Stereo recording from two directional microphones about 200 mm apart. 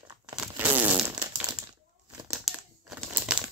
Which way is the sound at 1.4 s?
20° right (ahead or behind).